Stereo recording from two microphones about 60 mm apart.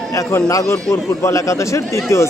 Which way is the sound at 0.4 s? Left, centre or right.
Left.